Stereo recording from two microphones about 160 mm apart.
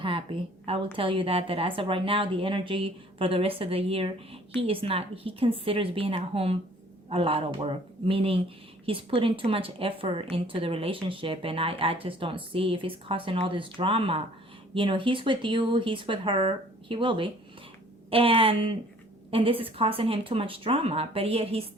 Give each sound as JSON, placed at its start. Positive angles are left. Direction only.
{"t": 0.0, "sound": "a woman's voice", "side_deg": -35}